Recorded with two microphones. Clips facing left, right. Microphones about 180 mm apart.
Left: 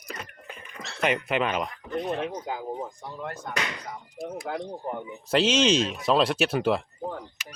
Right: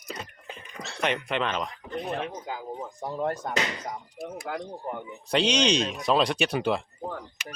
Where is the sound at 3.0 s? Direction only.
35° right (ahead or behind).